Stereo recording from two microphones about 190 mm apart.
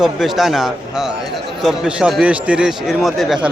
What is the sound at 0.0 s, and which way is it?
A man's voice, centre (ahead or behind).